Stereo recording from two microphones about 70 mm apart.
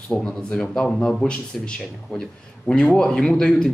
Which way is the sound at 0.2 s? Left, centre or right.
Centre.